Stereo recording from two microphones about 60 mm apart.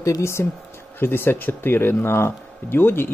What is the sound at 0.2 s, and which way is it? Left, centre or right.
Speech, left.